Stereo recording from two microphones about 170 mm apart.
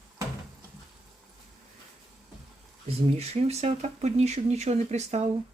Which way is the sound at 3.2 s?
40° right (ahead or behind).